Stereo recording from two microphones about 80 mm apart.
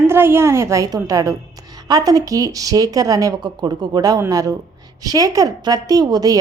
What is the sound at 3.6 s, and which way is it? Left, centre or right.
A woman's voice, right.